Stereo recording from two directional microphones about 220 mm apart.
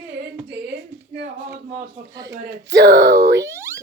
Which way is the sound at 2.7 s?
50° right (ahead or behind).